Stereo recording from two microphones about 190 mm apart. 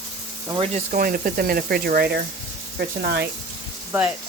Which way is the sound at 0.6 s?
40° right (ahead or behind).